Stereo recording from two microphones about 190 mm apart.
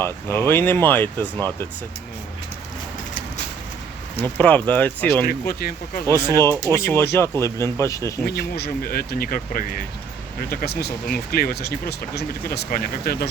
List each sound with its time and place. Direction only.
0.0 s speech: 10° left (ahead or behind)
4.2 s speech: 10° left (ahead or behind)
5.2 s speech: 50° left (ahead or behind)
6.1 s speech: 15° left (ahead or behind)
8.2 s speech: 60° left (ahead or behind)